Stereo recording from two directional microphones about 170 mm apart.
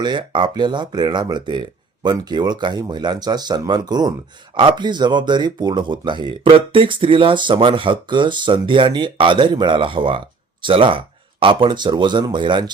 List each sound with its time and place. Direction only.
0.0 s speech: 25° right (ahead or behind)